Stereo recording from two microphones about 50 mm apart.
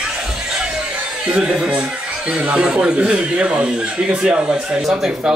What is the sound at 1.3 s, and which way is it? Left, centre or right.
Speech, right.